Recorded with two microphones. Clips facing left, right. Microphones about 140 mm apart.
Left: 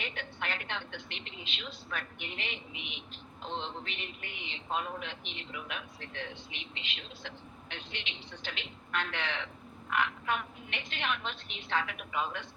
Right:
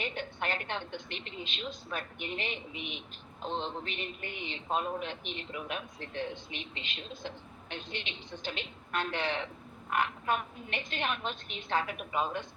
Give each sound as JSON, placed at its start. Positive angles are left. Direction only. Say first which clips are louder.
{"t": 0.0, "sound": "a sound", "louder": "right 4 dB", "side_deg": -40}
{"t": 0.9, "sound": "speech", "louder": "right 4 dB", "side_deg": -45}
{"t": 3.6, "sound": "a woman's voice", "louder": "right 3 dB", "side_deg": -45}